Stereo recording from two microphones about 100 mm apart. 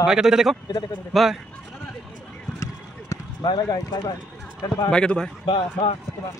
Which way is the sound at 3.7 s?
45° left (ahead or behind).